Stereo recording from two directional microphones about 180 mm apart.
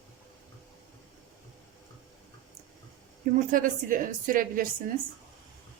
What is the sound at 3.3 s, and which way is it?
A woman's voice, 45° right (ahead or behind).